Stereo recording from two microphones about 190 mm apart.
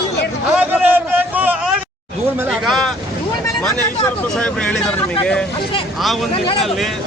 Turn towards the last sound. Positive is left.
turn(degrees=30)  # may be behind; listen again after turning